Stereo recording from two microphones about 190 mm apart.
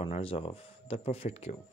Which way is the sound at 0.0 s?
30° left (ahead or behind).